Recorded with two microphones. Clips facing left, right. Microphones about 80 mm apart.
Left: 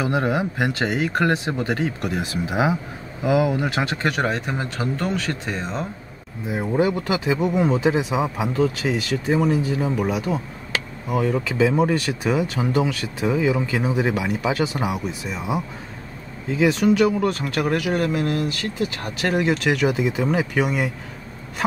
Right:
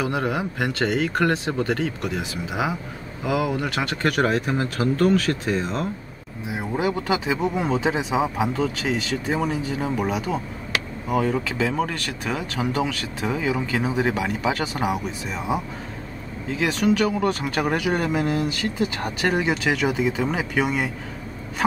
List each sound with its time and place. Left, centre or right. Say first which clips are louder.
0.0 s speech: left 2 dB; left; by 3.5 s centre
3.5 s speech: left 2 dB; centre
4.8 s speech: right 7 dB; centre
6.4 s speech: left 4 dB; centre
6.9 s speech: left 1 dB; centre
17.6 s speech: left 2 dB; centre
19.3 s speech: left 5 dB; centre